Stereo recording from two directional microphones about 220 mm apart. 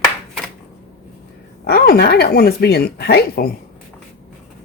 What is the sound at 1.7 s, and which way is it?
Speech, 45° left (ahead or behind).